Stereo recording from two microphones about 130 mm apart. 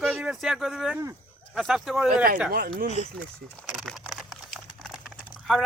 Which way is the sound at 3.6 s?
Centre (ahead or behind).